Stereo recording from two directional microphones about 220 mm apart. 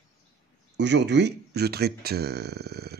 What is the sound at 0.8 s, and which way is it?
Speech, 50° right (ahead or behind).